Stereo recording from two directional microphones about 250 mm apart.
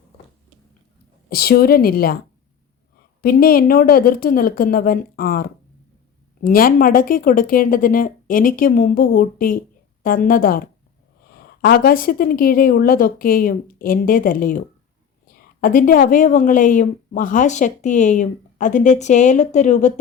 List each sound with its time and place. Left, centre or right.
1.3 s a woman's voice: left
3.2 s a woman's voice: left